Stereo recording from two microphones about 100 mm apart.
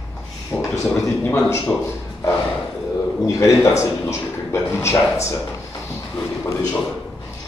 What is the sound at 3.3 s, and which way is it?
A man's voice, 30° left (ahead or behind).